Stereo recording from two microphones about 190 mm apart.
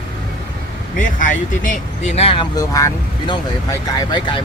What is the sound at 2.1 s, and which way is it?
Speech, 30° left (ahead or behind).